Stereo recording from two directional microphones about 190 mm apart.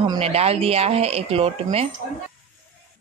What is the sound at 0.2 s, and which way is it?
A woman's voice, 30° right (ahead or behind).